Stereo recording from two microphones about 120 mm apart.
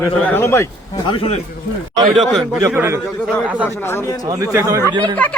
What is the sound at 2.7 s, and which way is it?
Speech, 20° right (ahead or behind).